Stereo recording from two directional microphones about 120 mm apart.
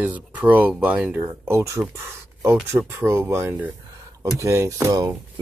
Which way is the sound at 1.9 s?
20° right (ahead or behind).